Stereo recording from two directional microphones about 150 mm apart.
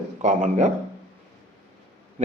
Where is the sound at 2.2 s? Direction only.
40° right (ahead or behind).